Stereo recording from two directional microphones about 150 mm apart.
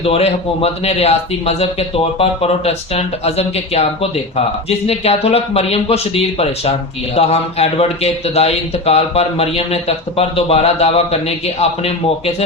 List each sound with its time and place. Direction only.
0.0 s a man's voice: 40° left (ahead or behind)
4.9 s a man's voice: 40° left (ahead or behind)